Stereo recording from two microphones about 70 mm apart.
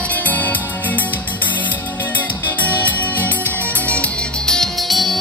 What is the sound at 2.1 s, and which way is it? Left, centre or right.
Music, left.